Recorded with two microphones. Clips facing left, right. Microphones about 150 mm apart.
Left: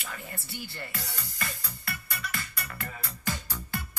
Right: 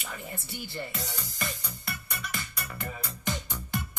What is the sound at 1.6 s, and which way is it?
Music, 20° right (ahead or behind).